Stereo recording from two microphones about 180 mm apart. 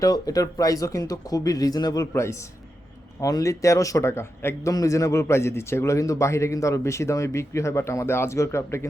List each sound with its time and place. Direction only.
0.0 s a man's voice: 20° left (ahead or behind)